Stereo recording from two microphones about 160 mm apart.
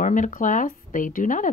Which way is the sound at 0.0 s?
55° left (ahead or behind).